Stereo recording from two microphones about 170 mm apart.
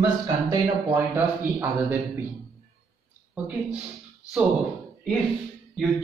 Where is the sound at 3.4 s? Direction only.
10° right (ahead or behind).